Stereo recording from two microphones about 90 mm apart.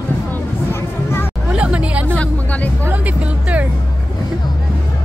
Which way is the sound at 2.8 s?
15° right (ahead or behind).